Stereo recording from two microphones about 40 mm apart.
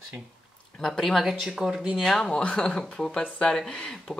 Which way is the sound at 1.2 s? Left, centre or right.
Centre.